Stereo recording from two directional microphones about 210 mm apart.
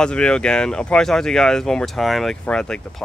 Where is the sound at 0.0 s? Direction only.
5° left (ahead or behind).